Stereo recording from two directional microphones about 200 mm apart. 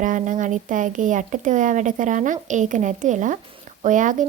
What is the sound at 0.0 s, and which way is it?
Speech, 40° right (ahead or behind).